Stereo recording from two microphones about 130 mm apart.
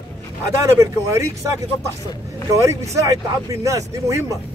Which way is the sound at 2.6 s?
25° right (ahead or behind).